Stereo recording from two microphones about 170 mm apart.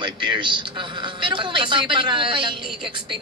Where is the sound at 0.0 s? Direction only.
25° right (ahead or behind).